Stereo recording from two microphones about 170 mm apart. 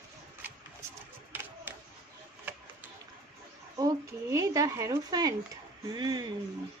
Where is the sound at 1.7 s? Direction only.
10° right (ahead or behind).